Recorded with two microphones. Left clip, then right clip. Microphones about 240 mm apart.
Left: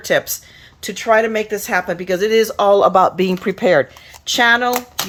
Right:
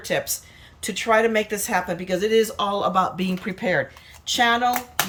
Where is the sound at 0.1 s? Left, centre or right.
Centre.